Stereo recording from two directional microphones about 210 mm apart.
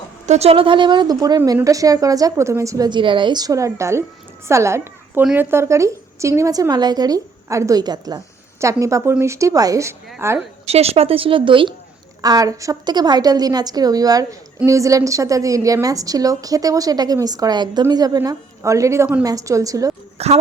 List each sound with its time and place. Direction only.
0.3 s a woman's voice: 30° right (ahead or behind); by 10.4 s 10° right (ahead or behind)
10.7 s a woman's voice: 30° right (ahead or behind)
20.1 s speech: 30° right (ahead or behind)